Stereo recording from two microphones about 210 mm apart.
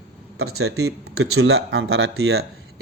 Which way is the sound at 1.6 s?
60° right (ahead or behind).